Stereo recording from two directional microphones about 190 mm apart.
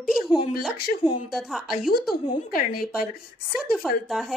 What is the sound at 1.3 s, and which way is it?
Speech, centre (ahead or behind).